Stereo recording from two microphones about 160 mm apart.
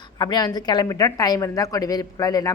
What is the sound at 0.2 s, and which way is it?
A woman's voice, 25° left (ahead or behind).